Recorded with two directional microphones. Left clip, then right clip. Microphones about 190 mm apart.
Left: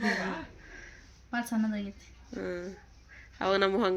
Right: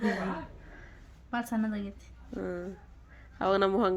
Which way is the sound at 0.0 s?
15° right (ahead or behind).